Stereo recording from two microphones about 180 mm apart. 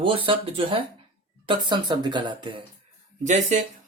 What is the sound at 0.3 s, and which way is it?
Speech, 30° right (ahead or behind).